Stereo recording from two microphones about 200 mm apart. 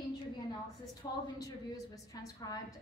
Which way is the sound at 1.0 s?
20° left (ahead or behind).